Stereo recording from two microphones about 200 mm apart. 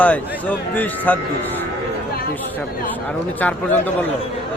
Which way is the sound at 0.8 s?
10° left (ahead or behind).